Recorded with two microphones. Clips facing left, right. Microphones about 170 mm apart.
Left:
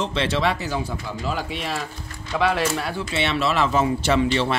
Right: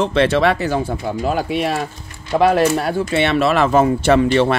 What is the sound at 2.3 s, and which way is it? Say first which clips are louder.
Speech: right 8 dB; 45° right (ahead or behind).